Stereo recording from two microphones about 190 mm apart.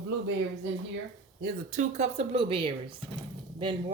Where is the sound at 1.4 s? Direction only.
40° right (ahead or behind).